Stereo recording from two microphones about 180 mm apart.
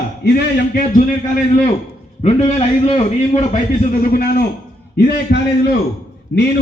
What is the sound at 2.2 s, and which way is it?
A man's voice, 35° left (ahead or behind).